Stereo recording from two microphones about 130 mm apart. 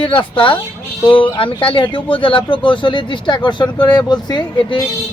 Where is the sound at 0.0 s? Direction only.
40° left (ahead or behind).